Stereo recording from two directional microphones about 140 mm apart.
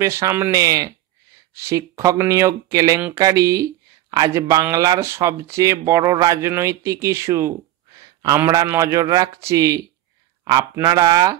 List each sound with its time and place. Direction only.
0.0 s speech: 20° right (ahead or behind)